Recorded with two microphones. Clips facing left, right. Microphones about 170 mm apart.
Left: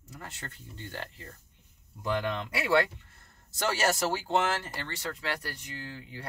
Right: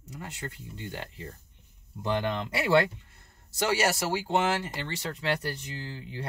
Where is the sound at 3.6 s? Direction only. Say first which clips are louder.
Right 1 dB; 10° right (ahead or behind); by 6.3 s 25° right (ahead or behind).